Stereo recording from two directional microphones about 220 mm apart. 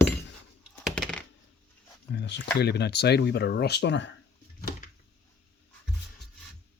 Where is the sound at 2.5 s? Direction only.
50° left (ahead or behind).